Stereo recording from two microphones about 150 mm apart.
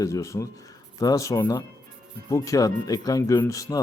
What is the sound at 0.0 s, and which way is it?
A man's voice, 20° left (ahead or behind).